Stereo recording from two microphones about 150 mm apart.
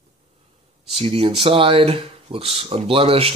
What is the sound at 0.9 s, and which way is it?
Speech, 40° right (ahead or behind).